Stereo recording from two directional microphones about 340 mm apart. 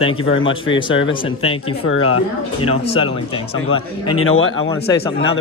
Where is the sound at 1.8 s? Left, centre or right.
Left.